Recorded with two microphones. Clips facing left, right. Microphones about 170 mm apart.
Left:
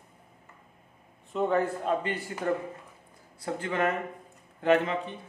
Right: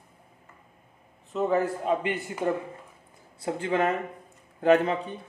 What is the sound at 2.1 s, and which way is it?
Speech, 20° right (ahead or behind).